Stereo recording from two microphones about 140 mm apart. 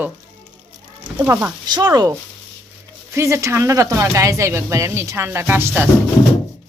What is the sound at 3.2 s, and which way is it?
Speech, 20° right (ahead or behind).